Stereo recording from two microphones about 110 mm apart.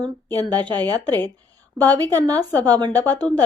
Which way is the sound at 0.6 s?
40° right (ahead or behind).